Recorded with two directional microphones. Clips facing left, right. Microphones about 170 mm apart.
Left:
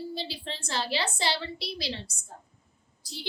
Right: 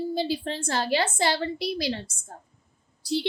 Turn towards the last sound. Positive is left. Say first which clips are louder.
# right 16 dB
turn(degrees=-75)  # may be behind; listen again after turning